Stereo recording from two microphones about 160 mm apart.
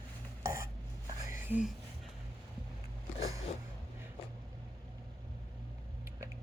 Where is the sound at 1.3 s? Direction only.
10° right (ahead or behind).